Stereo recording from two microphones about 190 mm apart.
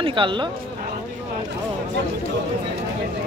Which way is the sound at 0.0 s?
25° right (ahead or behind).